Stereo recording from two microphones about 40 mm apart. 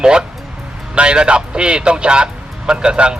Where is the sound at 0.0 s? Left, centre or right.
Centre.